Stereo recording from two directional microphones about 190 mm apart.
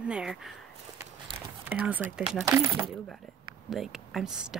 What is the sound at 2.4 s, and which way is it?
Speech, 20° right (ahead or behind).